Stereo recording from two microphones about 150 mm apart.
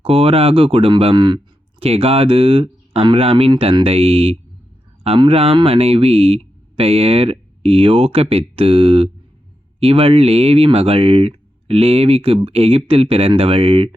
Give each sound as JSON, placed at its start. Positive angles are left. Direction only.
{"t": 0.0, "sound": "speech", "side_deg": -40}